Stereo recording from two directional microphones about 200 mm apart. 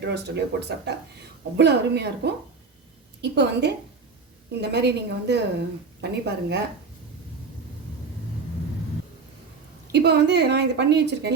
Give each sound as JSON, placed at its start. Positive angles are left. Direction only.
{"t": 0.0, "sound": "a woman's voice", "side_deg": -55}
{"t": 9.9, "sound": "a woman's voice", "side_deg": -55}